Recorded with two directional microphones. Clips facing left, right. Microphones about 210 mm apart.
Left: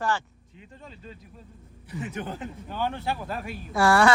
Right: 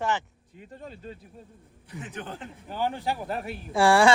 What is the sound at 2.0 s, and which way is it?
Speech, 10° left (ahead or behind).